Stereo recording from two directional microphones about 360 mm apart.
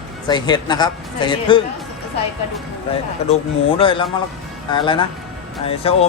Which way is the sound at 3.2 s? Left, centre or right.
Centre.